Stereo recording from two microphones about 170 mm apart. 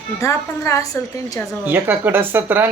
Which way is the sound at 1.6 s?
10° right (ahead or behind).